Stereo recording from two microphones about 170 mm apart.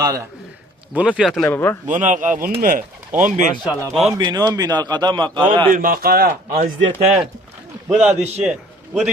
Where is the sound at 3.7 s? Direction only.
5° right (ahead or behind).